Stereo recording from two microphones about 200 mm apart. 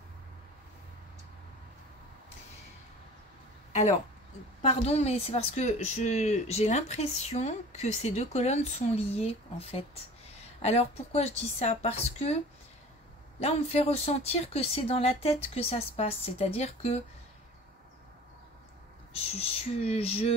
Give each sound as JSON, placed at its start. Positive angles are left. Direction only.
{"t": 4.6, "sound": "speech", "side_deg": 35}
{"t": 13.4, "sound": "speech", "side_deg": 30}
{"t": 19.1, "sound": "speech", "side_deg": 30}